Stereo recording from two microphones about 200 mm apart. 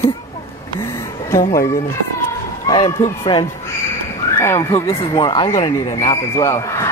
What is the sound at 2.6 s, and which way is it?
Speech, 20° left (ahead or behind).